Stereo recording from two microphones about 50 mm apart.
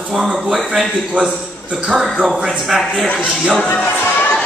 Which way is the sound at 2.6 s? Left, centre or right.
Centre.